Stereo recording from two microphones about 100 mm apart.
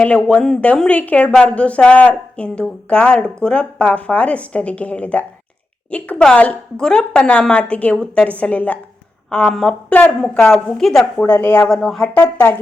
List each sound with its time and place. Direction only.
0.0 s a woman's voice: 10° left (ahead or behind)
11.3 s speech: 20° left (ahead or behind)
11.7 s a woman's voice: centre (ahead or behind)
12.0 s speech: 15° left (ahead or behind)